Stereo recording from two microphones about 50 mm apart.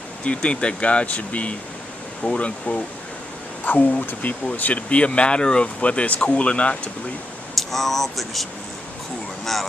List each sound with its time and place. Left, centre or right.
0.2 s speech: left
7.5 s speech: centre